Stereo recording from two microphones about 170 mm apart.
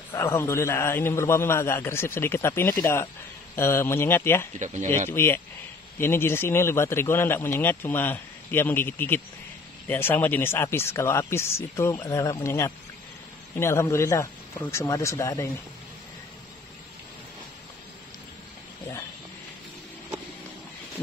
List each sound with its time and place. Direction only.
0.1 s a man's voice: 15° left (ahead or behind)